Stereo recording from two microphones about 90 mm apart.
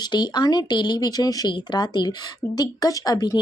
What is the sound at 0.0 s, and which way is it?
Speech, 55° left (ahead or behind).